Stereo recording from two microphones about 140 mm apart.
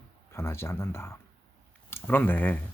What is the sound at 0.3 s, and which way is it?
Speech, 20° left (ahead or behind).